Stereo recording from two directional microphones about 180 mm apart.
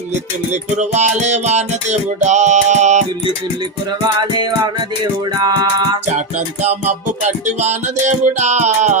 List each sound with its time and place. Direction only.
0.5 s music: 40° right (ahead or behind)
4.2 s music: 25° right (ahead or behind)
6.1 s music: 40° right (ahead or behind)